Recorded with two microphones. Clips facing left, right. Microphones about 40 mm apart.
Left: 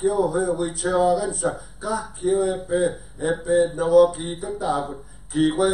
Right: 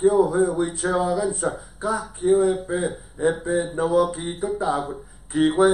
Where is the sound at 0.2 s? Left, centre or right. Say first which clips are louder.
Right 3 dB; centre.